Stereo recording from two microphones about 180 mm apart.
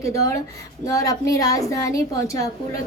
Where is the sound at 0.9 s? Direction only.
20° left (ahead or behind).